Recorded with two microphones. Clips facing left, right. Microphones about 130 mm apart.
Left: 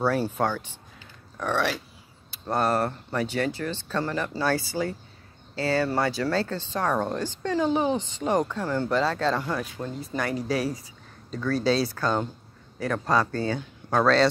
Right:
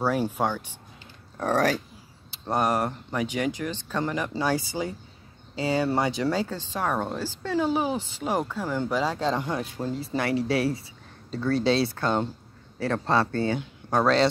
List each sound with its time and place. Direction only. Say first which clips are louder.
0.0 s speech: left 1 dB; 10° right (ahead or behind)
1.4 s speech: right 3 dB; 40° right (ahead or behind)
2.3 s a woman's voice: even; 20° right (ahead or behind)